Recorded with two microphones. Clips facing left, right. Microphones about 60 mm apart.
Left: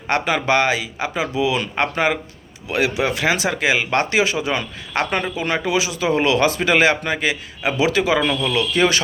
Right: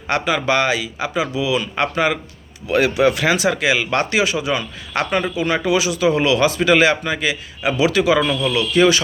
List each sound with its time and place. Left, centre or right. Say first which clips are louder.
0.1 s speech: even; left
1.7 s speech: right 1 dB; left
2.6 s speech: right 4 dB; centre; by 7.7 s left
7.8 s speech: right 2 dB; left